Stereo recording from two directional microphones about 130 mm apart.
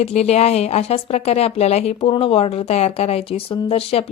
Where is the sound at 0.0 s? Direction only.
55° left (ahead or behind).